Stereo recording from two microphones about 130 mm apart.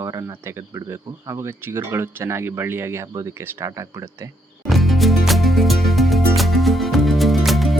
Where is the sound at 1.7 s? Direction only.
20° right (ahead or behind).